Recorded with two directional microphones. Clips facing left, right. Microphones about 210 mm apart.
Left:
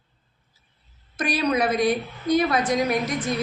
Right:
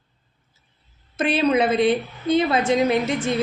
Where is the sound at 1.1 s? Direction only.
25° right (ahead or behind).